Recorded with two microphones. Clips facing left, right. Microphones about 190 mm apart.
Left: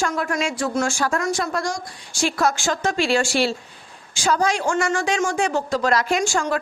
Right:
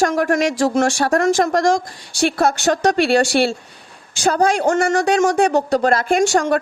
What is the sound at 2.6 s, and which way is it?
Speech, 65° right (ahead or behind).